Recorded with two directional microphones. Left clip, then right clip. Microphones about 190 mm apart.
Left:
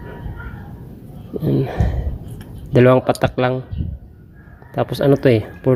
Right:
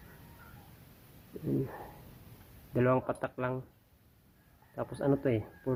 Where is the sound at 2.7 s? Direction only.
25° left (ahead or behind).